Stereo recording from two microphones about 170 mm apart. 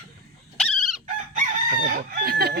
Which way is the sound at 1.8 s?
60° right (ahead or behind).